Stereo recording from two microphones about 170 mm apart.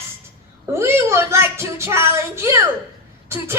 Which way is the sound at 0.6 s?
15° right (ahead or behind).